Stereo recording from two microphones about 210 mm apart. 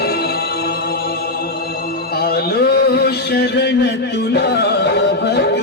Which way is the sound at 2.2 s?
50° left (ahead or behind).